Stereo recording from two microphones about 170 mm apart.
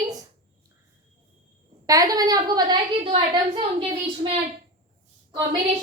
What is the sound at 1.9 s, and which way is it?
A woman's voice, 20° right (ahead or behind).